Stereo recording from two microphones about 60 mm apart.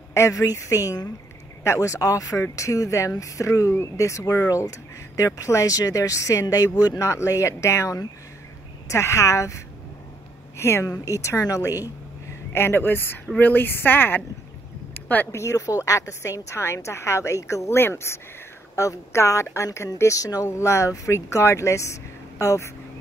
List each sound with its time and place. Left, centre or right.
0.1 s a woman's voice: left
0.8 s speech: left
1.6 s speech: left
7.1 s speech: left
10.6 s speech: left
12.5 s speech: left
15.3 s speech: left
18.8 s speech: left
20.0 s speech: left
20.4 s speech: left